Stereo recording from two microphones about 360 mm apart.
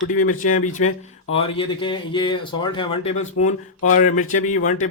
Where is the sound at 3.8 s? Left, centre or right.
Left.